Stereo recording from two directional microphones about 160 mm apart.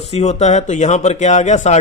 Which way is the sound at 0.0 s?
40° left (ahead or behind).